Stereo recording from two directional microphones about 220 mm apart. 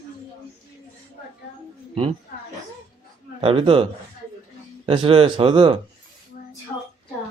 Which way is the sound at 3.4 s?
25° right (ahead or behind).